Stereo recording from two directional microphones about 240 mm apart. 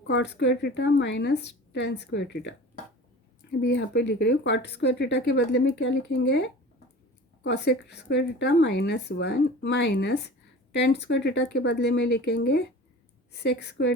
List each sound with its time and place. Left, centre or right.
0.1 s speech: left
3.6 s speech: left